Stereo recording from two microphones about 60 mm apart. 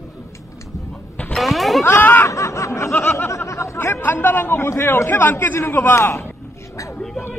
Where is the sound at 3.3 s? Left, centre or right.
Left.